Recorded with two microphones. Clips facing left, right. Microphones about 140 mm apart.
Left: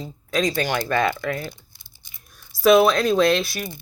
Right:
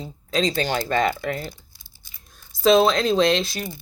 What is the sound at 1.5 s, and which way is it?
Crumpling, 20° left (ahead or behind).